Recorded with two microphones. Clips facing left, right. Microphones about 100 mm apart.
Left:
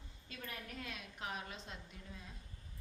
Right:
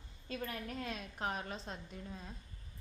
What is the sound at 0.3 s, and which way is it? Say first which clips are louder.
A woman's voice: right 7 dB; 35° right (ahead or behind).